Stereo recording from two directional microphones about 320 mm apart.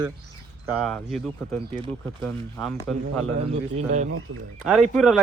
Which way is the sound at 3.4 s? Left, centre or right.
Right.